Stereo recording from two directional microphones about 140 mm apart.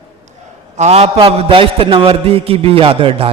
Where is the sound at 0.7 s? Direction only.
50° right (ahead or behind).